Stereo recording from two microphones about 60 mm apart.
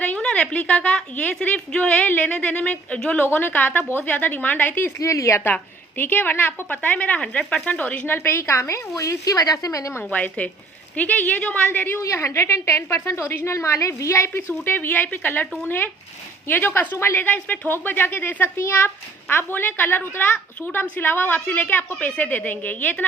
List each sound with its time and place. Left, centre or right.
0.0 s a sound: centre
1.4 s speech: centre
2.2 s speech: left
3.2 s speech: left
4.9 s a woman's voice: left
6.0 s speech: left
7.2 s speech: centre
8.0 s a woman's voice: left
10.0 s speech: left
11.9 s a woman's voice: left
14.4 s speech: left
20.3 s speech: left
21.0 s speech: left